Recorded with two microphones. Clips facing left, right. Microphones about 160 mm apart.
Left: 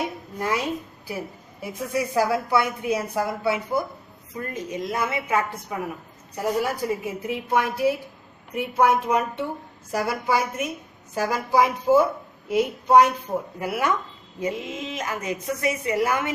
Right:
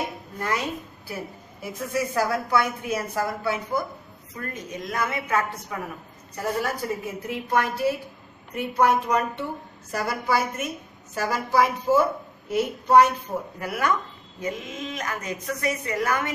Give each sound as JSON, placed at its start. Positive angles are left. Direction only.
{"t": 1.6, "sound": "a woman's voice", "side_deg": 15}
{"t": 4.4, "sound": "a woman's voice", "side_deg": 25}
{"t": 5.0, "sound": "a woman's voice", "side_deg": 10}